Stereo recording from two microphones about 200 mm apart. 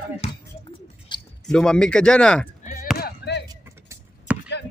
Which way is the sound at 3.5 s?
15° right (ahead or behind).